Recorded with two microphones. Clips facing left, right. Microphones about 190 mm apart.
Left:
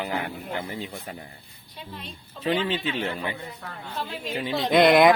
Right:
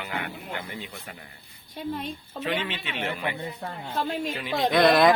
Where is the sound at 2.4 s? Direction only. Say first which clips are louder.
Left 5 dB; 30° left (ahead or behind).